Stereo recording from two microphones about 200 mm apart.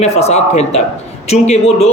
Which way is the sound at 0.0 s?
35° left (ahead or behind).